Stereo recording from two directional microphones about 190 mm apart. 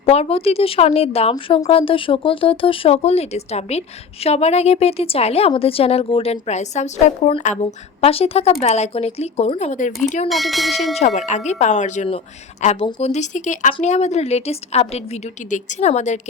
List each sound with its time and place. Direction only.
0.0 s speech: 30° left (ahead or behind)
10.2 s speech: centre (ahead or behind)
10.9 s speech: 35° left (ahead or behind)